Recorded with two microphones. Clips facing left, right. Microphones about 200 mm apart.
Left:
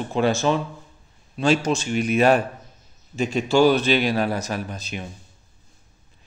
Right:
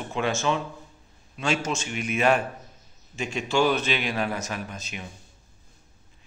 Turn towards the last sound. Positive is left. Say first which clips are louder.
# left 5 dB
turn(degrees=35)  # may be behind; listen again after turning